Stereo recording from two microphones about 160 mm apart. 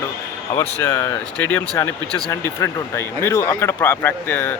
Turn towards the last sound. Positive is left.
turn(degrees=10)  # may be behind; listen again after turning